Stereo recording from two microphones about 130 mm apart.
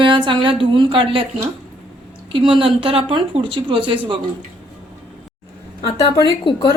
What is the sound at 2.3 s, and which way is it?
A woman's voice, 40° right (ahead or behind).